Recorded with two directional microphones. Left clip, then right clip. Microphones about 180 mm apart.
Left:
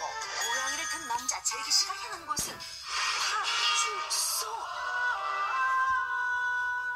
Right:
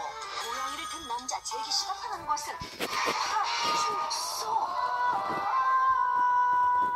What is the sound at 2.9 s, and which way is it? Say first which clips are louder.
Speech: right 1 dB; 25° left (ahead or behind).